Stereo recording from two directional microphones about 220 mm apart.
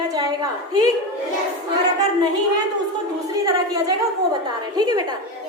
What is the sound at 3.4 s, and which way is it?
A woman's voice, 15° right (ahead or behind).